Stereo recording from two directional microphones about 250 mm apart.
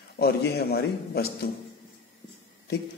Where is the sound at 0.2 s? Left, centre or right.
Left.